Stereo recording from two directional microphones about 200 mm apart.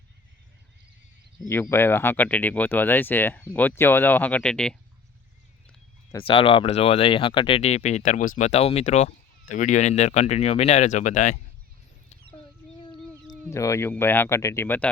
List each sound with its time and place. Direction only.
1.7 s speech: 10° left (ahead or behind)
6.2 s speech: 25° left (ahead or behind)
13.4 s speech: 15° left (ahead or behind)